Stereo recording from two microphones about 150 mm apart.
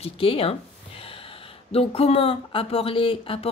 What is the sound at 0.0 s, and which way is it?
Speech, 40° left (ahead or behind).